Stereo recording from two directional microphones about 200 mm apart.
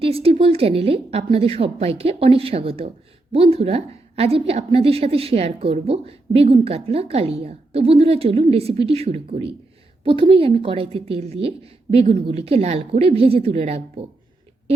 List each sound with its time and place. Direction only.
0.0 s a woman's voice: 30° right (ahead or behind)